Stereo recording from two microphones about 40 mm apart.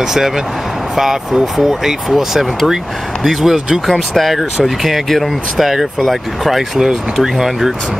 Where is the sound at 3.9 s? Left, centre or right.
Centre.